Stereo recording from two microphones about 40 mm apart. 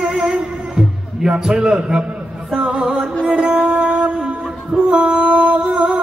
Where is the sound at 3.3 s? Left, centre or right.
Right.